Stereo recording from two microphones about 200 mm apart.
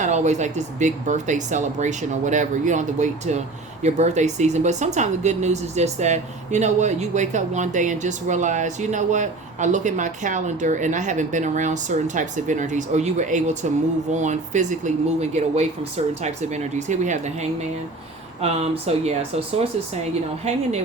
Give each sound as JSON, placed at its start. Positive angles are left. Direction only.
{"t": 0.0, "sound": "speech", "side_deg": -35}